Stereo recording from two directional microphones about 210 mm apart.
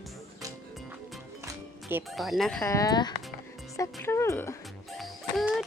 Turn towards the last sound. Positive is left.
turn(degrees=0)  # may be behind; listen again after turning